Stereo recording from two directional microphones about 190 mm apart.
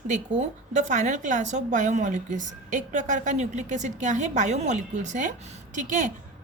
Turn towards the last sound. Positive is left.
turn(degrees=-40)  # may be behind; listen again after turning